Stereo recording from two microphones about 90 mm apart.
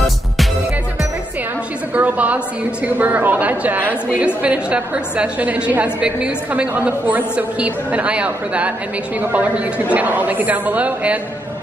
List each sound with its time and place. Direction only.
2.0 s a woman's voice: 15° right (ahead or behind)